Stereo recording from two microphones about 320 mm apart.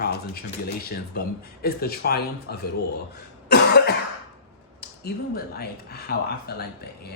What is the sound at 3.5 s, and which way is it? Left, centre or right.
Cough, left.